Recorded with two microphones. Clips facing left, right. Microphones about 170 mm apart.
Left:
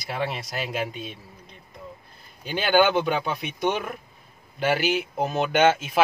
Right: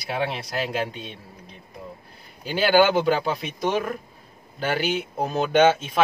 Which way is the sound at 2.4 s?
5° right (ahead or behind).